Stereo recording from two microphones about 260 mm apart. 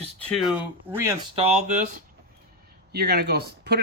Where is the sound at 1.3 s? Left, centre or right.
Right.